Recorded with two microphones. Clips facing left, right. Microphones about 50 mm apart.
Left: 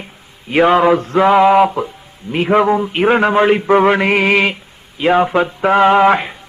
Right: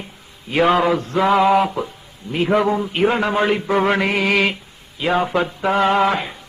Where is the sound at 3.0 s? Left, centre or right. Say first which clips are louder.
Left 5 dB; left.